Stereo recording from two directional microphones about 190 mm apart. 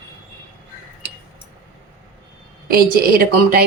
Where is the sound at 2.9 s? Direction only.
55° right (ahead or behind).